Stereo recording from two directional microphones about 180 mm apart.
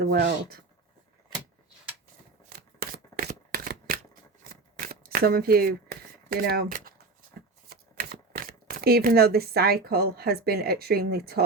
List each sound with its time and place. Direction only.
0.0 s speech: 65° right (ahead or behind)
2.4 s shuffling cards: 55° right (ahead or behind)
7.7 s speech: 60° right (ahead or behind)